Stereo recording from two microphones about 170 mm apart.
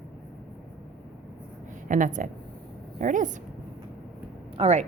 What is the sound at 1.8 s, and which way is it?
A woman's voice, 50° right (ahead or behind).